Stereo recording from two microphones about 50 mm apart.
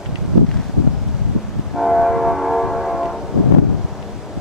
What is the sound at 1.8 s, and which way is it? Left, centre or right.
Train, centre.